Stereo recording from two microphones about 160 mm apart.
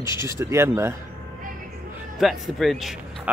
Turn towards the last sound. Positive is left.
turn(degrees=0)  # may be behind; listen again after turning